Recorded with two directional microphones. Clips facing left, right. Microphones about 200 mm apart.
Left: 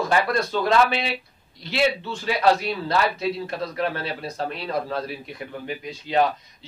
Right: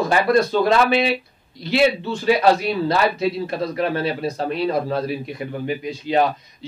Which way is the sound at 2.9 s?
10° right (ahead or behind).